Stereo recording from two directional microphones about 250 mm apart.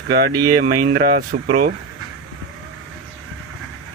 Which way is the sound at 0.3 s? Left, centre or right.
Right.